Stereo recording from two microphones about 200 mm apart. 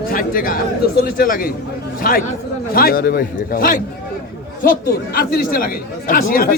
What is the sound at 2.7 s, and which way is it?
A man's voice, 50° left (ahead or behind).